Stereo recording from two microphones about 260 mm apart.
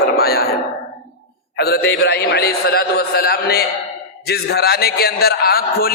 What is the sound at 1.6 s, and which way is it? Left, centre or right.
A man's voice, left.